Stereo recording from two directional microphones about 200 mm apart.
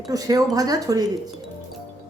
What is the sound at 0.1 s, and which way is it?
Speech, 15° right (ahead or behind).